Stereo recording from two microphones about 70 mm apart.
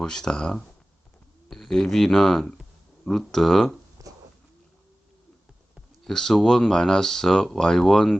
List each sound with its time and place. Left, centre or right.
0.0 s speech: centre
4.0 s a sound: right
6.1 s speech: centre